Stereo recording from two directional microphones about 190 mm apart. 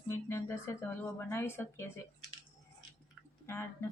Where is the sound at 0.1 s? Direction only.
15° left (ahead or behind).